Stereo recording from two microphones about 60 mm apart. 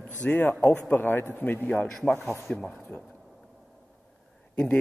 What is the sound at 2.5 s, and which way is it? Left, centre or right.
Speech, left.